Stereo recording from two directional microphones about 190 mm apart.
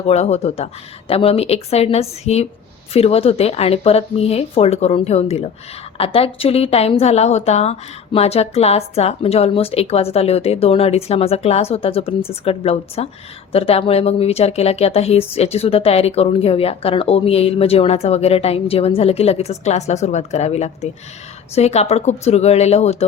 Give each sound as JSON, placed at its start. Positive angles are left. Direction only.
{"t": 0.0, "sound": "a woman's voice", "side_deg": 35}